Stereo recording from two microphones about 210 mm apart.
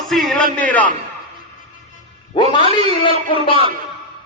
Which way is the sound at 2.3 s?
20° left (ahead or behind).